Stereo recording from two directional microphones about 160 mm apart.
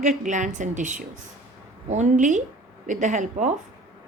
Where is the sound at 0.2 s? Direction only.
50° right (ahead or behind).